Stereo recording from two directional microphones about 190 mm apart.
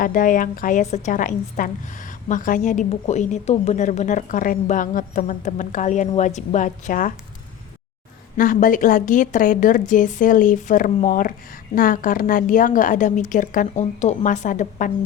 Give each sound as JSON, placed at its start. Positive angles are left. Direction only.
{"t": 0.0, "sound": "a woman's voice", "side_deg": 45}
{"t": 8.4, "sound": "a woman's voice", "side_deg": 45}